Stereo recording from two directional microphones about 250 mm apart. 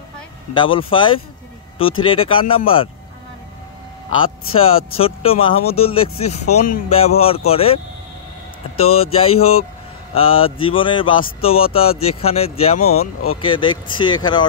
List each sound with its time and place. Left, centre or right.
0.6 s speech: left
4.6 s speech: left
8.8 s speech: left